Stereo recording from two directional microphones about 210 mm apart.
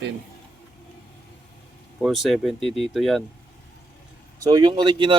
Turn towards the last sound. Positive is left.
turn(degrees=-25)  # may be behind; listen again after turning